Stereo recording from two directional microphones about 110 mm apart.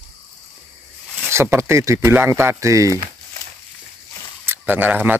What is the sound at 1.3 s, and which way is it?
Speech, 25° right (ahead or behind).